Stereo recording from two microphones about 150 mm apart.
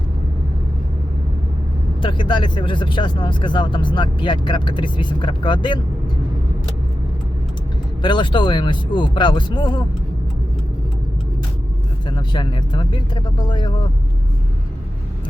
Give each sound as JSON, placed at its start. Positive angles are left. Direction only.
{"t": 2.0, "sound": "speech", "side_deg": 35}
{"t": 8.0, "sound": "speech", "side_deg": 30}
{"t": 12.0, "sound": "speech", "side_deg": 30}